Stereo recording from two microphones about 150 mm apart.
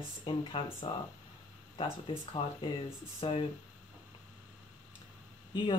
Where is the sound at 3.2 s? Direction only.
35° left (ahead or behind).